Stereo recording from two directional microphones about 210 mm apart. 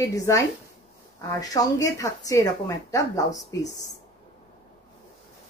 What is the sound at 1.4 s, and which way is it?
Speech, 15° left (ahead or behind).